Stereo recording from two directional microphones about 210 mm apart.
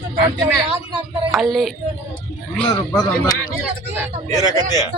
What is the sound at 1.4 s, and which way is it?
Speech, centre (ahead or behind).